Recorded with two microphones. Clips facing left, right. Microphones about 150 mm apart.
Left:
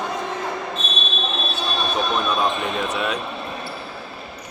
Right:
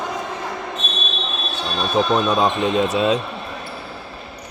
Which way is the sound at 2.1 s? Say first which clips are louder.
Right 4 dB; 25° right (ahead or behind).